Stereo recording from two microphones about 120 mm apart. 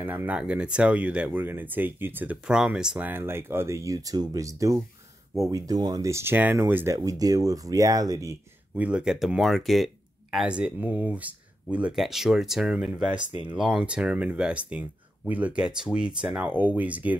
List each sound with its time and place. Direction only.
0.0 s speech: 15° right (ahead or behind)
7.0 s speech: 30° right (ahead or behind)
8.7 s speech: 10° right (ahead or behind)